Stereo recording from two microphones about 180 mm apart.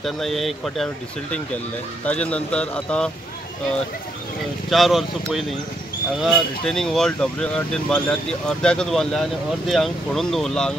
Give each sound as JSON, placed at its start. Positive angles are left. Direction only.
{"t": 0.0, "sound": "speech", "side_deg": 0}
{"t": 2.0, "sound": "speech", "side_deg": 5}
{"t": 4.6, "sound": "speech", "side_deg": 0}